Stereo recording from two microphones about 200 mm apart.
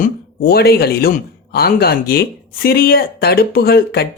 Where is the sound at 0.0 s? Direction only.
50° left (ahead or behind).